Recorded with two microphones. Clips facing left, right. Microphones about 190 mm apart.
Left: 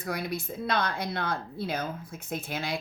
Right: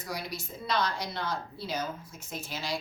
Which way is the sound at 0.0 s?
55° left (ahead or behind).